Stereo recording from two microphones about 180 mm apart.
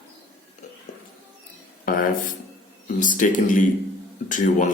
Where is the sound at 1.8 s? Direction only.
50° left (ahead or behind).